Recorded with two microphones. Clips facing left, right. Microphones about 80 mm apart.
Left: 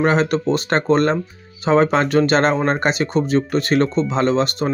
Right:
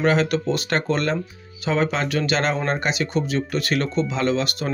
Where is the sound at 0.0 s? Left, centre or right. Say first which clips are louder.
Left 3 dB; left.